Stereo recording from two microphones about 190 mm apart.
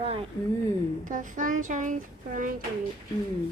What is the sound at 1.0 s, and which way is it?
Speech, 45° right (ahead or behind).